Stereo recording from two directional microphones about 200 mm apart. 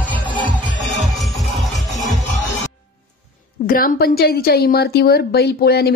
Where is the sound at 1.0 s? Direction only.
Centre (ahead or behind).